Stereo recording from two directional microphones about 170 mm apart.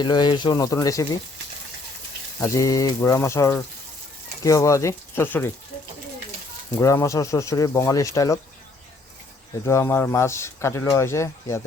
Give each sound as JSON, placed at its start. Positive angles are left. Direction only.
{"t": 0.0, "sound": "speech", "side_deg": 25}
{"t": 2.4, "sound": "speech", "side_deg": 20}
{"t": 6.7, "sound": "speech", "side_deg": 15}
{"t": 9.6, "sound": "speech", "side_deg": 15}